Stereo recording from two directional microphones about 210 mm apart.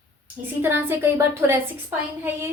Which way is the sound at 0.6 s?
10° right (ahead or behind).